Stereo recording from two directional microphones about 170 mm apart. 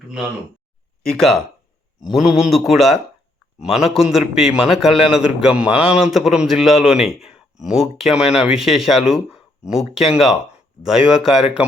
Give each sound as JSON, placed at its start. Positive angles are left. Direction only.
{"t": 1.1, "sound": "a man's voice", "side_deg": 0}